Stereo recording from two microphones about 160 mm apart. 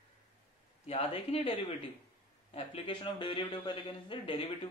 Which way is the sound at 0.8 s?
40° left (ahead or behind).